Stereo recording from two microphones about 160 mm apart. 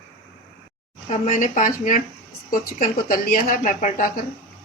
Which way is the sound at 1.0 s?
50° left (ahead or behind).